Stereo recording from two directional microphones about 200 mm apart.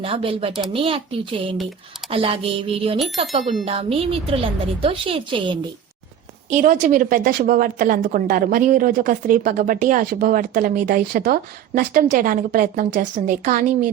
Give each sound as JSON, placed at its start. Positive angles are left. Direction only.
{"t": 0.0, "sound": "a woman's voice", "side_deg": -30}
{"t": 6.5, "sound": "a woman's voice", "side_deg": -35}